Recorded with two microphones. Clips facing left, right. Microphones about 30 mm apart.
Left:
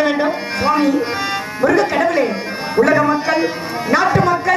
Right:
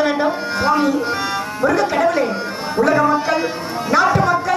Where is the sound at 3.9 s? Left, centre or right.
Centre.